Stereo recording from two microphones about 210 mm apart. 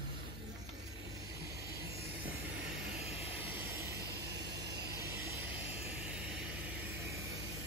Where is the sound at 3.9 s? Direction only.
50° right (ahead or behind).